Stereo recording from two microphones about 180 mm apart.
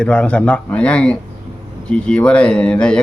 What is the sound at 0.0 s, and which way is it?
Speech, 5° left (ahead or behind).